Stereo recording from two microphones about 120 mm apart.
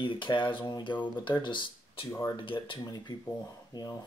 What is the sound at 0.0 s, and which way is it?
Speech, 45° left (ahead or behind).